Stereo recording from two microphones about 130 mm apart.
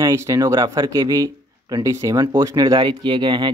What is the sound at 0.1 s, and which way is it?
Speech, 25° right (ahead or behind).